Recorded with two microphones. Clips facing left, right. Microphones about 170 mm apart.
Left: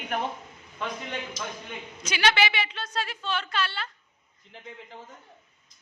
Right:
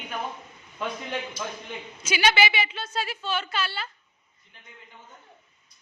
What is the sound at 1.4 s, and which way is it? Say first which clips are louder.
Speech: right 2 dB; 90° left.